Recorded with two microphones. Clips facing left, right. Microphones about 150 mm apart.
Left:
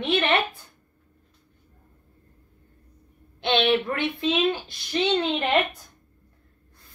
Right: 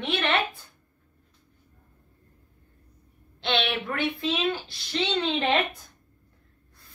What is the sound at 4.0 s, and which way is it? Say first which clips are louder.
A woman's voice: left 3 dB; 15° left (ahead or behind).